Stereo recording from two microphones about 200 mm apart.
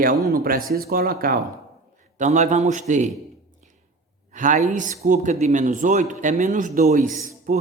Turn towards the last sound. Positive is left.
turn(degrees=-40)  # may be behind; listen again after turning